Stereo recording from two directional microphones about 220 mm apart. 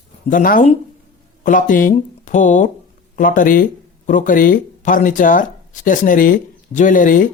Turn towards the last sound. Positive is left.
turn(degrees=40)  # may be behind; listen again after turning